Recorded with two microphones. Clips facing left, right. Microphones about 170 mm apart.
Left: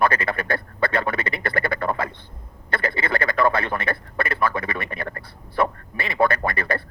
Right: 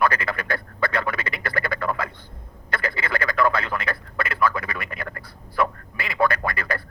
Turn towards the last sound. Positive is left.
turn(degrees=25)  # may be behind; listen again after turning